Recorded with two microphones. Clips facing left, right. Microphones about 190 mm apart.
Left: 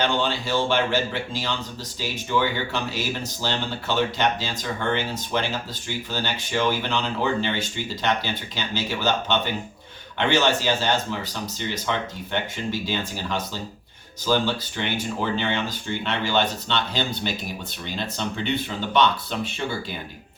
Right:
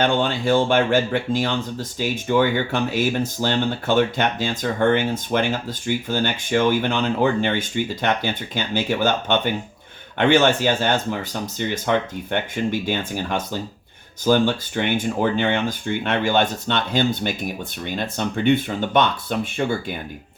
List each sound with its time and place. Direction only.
0.0 s speech: 55° right (ahead or behind)